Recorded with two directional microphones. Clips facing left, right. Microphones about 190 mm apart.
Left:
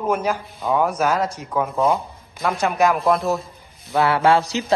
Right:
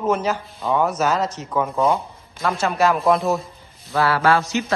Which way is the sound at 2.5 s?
15° left (ahead or behind).